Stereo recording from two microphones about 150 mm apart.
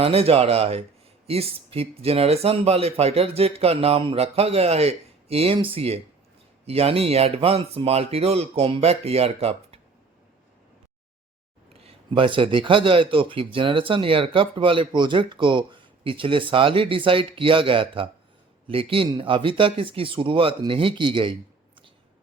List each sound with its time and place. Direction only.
0.0 s speech: 40° right (ahead or behind)
11.7 s speech: 40° right (ahead or behind)